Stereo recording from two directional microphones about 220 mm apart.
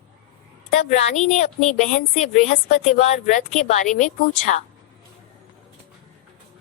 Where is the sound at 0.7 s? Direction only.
35° left (ahead or behind).